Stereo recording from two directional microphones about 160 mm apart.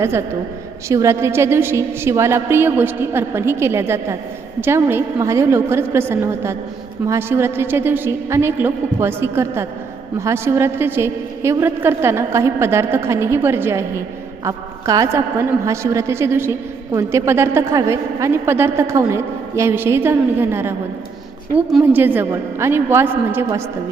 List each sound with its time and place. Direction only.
0.9 s a woman's voice: 15° right (ahead or behind)
21.9 s a woman's voice: 10° right (ahead or behind)